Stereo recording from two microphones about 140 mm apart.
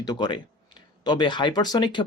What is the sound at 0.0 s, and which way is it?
Speech, 30° left (ahead or behind).